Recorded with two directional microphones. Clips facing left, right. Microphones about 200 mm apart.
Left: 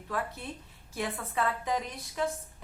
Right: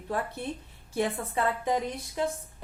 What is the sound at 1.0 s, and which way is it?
Speech, 30° right (ahead or behind).